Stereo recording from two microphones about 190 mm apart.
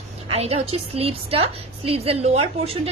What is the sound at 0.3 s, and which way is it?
A woman's voice, 30° right (ahead or behind).